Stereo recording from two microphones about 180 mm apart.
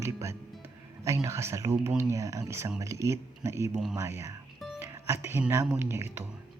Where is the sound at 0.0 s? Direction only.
15° right (ahead or behind).